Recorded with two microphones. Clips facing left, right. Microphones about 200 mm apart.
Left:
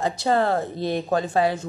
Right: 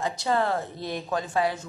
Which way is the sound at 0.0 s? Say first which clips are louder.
Left 4 dB; 35° left (ahead or behind).